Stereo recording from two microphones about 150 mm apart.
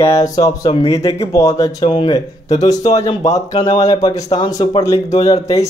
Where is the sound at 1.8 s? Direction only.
35° left (ahead or behind).